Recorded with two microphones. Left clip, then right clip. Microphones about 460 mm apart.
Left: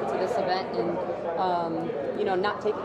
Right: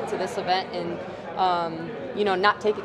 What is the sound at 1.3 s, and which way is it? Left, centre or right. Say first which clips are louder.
A man's voice: right 5 dB; right.